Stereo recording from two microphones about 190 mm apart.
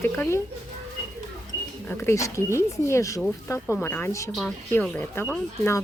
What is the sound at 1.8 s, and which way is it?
Speech, 10° left (ahead or behind).